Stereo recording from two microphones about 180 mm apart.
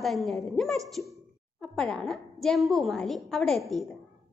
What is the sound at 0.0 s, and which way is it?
A woman's voice, centre (ahead or behind).